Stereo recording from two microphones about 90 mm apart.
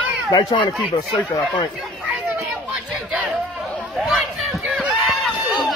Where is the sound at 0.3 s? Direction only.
50° left (ahead or behind).